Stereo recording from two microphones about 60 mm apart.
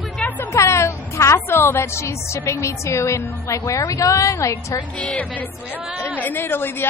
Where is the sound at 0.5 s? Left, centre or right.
Left.